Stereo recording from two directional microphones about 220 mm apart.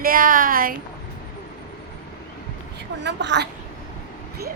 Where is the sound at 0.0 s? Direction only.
40° right (ahead or behind).